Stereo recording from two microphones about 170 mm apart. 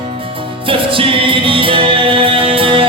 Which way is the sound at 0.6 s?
30° right (ahead or behind).